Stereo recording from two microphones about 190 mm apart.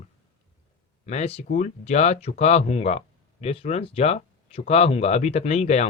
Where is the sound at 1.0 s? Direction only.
35° left (ahead or behind).